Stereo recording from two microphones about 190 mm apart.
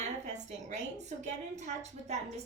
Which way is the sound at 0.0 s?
40° right (ahead or behind).